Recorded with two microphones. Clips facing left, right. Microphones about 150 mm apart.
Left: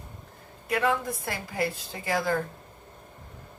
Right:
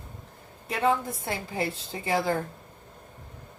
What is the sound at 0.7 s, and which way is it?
Speech, 25° right (ahead or behind).